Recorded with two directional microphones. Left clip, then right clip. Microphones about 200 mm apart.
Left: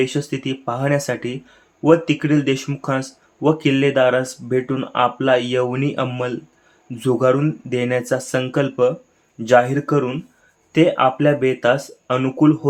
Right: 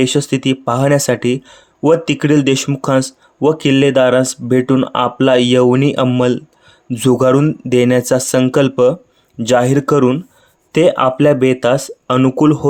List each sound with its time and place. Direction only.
0.0 s speech: 55° right (ahead or behind)